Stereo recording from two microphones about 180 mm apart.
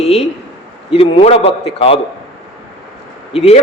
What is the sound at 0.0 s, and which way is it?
A man's voice, 35° left (ahead or behind).